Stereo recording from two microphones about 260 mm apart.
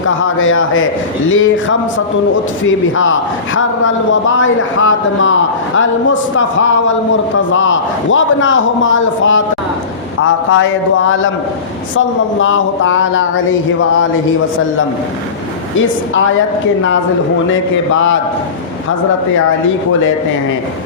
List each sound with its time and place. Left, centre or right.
0.0 s a man's voice: left
10.5 s a man's voice: left
15.8 s a man's voice: left
17.5 s a man's voice: left